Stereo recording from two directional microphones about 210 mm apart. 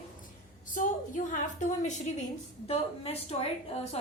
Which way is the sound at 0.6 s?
40° left (ahead or behind).